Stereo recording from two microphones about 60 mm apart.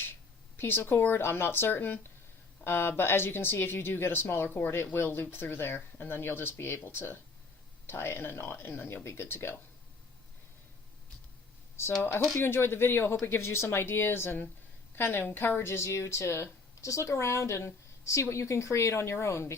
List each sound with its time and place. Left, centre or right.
0.5 s speech: left
11.8 s speech: left